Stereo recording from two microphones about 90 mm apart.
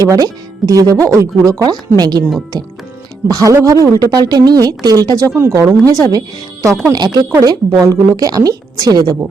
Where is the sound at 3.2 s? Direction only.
40° right (ahead or behind).